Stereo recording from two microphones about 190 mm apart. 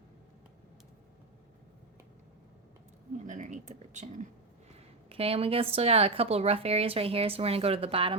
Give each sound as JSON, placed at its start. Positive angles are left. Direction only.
{"t": 3.2, "sound": "a woman's voice", "side_deg": -40}